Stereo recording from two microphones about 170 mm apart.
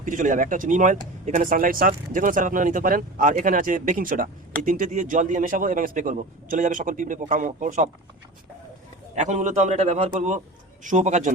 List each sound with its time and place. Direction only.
0.0 s speech: 50° right (ahead or behind)
9.1 s speech: 45° right (ahead or behind)